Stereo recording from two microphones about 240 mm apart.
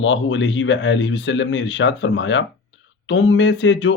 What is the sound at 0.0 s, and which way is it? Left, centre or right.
Speech, left.